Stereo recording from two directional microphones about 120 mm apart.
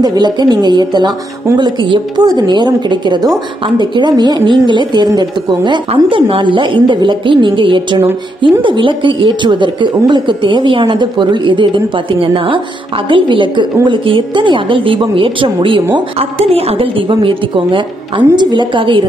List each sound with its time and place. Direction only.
0.0 s a woman's voice: 35° right (ahead or behind)
5.9 s a woman's voice: 45° right (ahead or behind)
16.2 s a woman's voice: 55° right (ahead or behind)